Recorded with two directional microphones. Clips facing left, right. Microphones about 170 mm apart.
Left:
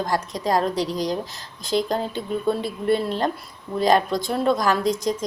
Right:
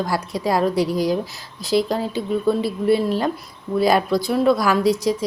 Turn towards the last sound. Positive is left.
turn(degrees=-5)  # may be behind; listen again after turning